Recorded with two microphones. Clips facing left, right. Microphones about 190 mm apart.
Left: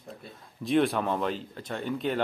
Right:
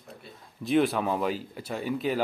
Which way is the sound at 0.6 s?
Centre (ahead or behind).